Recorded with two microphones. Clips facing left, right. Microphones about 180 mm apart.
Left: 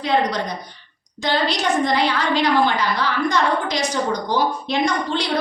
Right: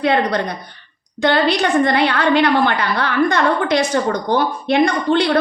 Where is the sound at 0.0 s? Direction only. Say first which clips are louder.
Right 3 dB; 60° right (ahead or behind).